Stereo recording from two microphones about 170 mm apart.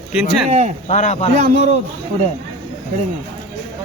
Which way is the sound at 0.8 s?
40° left (ahead or behind).